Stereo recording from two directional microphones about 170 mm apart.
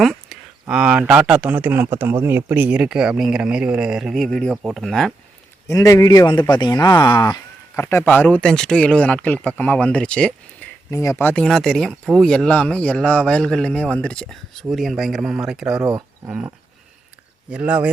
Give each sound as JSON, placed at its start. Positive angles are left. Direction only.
{"t": 0.0, "sound": "a man's voice", "side_deg": 0}
{"t": 5.6, "sound": "speech", "side_deg": 20}
{"t": 10.9, "sound": "speech", "side_deg": 20}
{"t": 15.9, "sound": "speech", "side_deg": -15}
{"t": 17.5, "sound": "a man's voice", "side_deg": -5}